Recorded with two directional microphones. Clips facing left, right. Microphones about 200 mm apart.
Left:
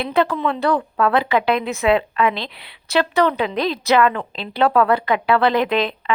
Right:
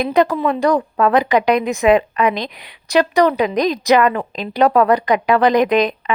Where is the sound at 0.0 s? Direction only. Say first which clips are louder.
Right 4 dB; 15° right (ahead or behind).